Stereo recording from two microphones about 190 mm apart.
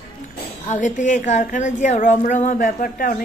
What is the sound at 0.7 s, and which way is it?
A woman's voice, 40° left (ahead or behind).